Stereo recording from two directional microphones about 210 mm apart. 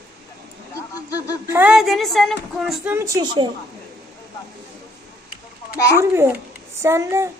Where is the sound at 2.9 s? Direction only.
15° right (ahead or behind).